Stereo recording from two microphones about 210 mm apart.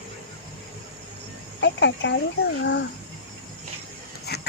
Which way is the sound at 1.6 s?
60° left (ahead or behind).